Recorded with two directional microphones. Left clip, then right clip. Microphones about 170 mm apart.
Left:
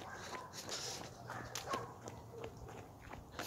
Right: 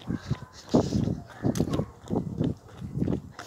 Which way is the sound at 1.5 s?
45° right (ahead or behind).